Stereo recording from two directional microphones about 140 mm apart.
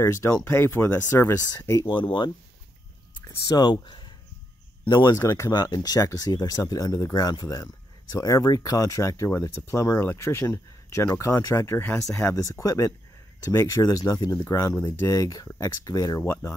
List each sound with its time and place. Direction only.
0.0 s speech: 20° left (ahead or behind)
3.2 s speech: 20° left (ahead or behind)
5.1 s speech: 20° left (ahead or behind)